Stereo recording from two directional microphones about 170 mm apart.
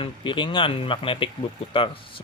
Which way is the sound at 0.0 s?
30° left (ahead or behind).